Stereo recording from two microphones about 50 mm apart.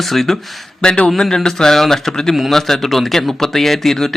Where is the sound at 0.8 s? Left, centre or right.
Centre.